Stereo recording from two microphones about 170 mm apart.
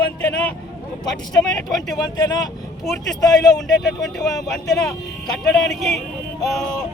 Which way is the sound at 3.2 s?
20° left (ahead or behind).